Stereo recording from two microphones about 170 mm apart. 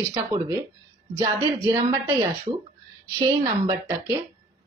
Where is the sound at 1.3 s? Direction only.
20° right (ahead or behind).